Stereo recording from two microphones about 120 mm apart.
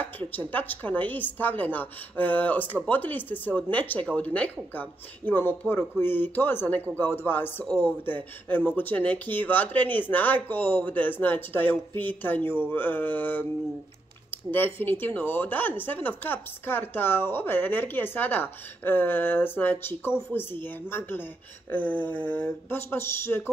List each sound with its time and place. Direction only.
0.0 s speech: 15° left (ahead or behind)
14.5 s speech: 15° left (ahead or behind)